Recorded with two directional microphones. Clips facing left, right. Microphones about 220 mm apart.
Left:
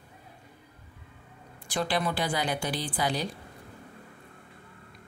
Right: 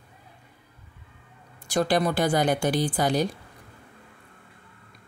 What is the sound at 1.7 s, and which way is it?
Speech, 40° right (ahead or behind).